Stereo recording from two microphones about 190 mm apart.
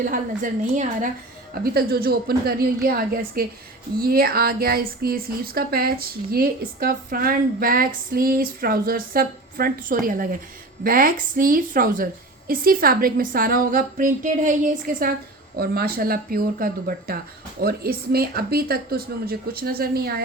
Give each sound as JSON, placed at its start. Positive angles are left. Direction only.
{"t": 0.0, "sound": "speech", "side_deg": -45}